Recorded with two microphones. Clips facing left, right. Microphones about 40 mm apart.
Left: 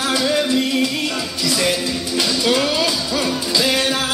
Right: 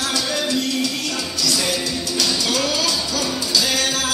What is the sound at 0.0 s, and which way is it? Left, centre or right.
Music, left.